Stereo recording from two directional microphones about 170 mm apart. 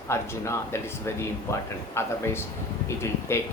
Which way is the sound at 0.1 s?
15° left (ahead or behind).